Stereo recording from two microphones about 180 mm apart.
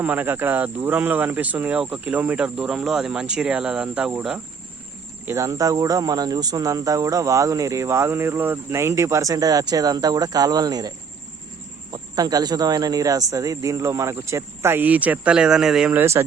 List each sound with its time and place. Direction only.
0.0 s speech: 10° right (ahead or behind)
5.2 s speech: 15° right (ahead or behind)